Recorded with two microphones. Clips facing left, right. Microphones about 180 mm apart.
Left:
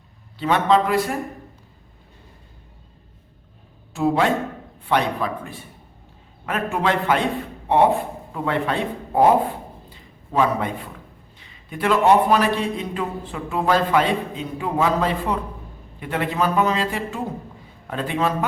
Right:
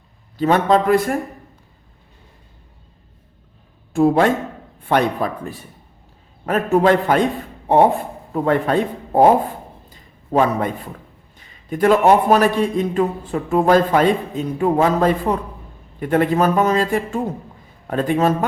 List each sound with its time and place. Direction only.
0.3 s a man's voice: 45° right (ahead or behind)
3.9 s a man's voice: 50° right (ahead or behind)
9.9 s a sound: 45° right (ahead or behind)
11.3 s a man's voice: 45° right (ahead or behind)